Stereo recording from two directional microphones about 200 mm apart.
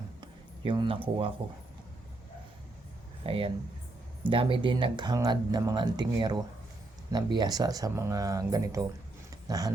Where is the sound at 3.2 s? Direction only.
25° right (ahead or behind).